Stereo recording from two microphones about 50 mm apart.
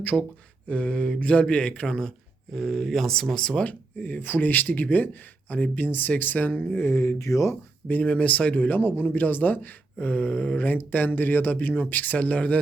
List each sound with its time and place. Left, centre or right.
0.0 s mantra: left
1.9 s speech: centre
3.6 s speech: left
6.7 s speech: left
7.2 s speech: left
7.9 s speech: left
11.8 s mantra: left